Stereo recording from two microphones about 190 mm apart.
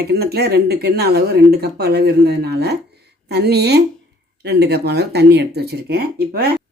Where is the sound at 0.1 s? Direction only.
55° right (ahead or behind).